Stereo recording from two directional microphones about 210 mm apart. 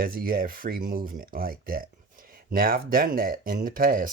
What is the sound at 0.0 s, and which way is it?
Speech, 45° right (ahead or behind).